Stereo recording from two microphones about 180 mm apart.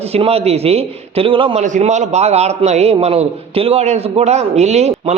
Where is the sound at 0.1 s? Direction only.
35° right (ahead or behind).